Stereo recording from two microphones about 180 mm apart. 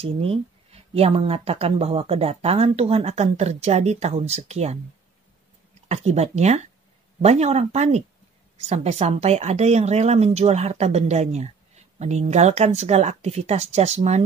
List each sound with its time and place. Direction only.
0.0 s speech: 30° right (ahead or behind)
5.9 s speech: 35° right (ahead or behind)